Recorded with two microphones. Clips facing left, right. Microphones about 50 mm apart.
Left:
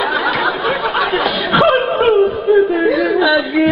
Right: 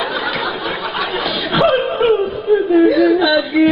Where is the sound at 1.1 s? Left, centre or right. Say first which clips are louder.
Left 4 dB; centre.